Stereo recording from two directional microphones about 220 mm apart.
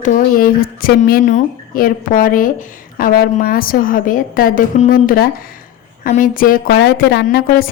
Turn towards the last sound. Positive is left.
turn(degrees=40)  # may be behind; listen again after turning